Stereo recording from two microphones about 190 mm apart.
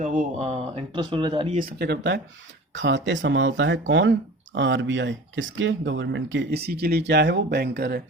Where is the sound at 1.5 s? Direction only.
50° right (ahead or behind).